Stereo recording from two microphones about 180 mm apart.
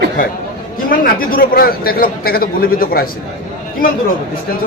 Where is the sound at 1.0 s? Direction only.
55° left (ahead or behind).